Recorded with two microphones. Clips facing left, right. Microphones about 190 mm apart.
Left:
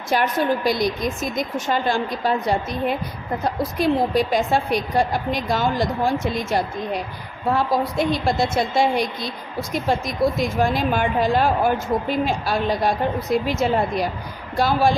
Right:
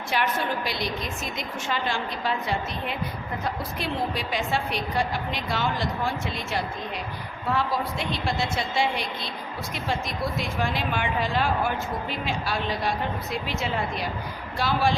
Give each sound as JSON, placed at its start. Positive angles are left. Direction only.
{"t": 0.1, "sound": "a woman's voice", "side_deg": 40}